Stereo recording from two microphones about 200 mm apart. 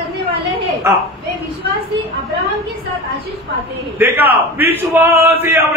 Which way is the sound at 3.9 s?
10° right (ahead or behind).